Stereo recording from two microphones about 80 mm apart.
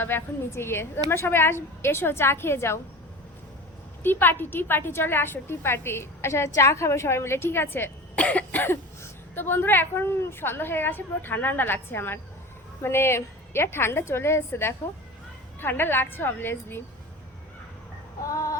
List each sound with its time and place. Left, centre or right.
0.0 s a woman's voice: left
4.0 s a woman's voice: left
8.1 s cough: centre
9.3 s a woman's voice: left
18.3 s synthetic singing: left